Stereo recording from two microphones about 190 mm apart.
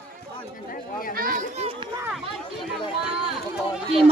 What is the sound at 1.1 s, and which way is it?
Children playing, 45° right (ahead or behind).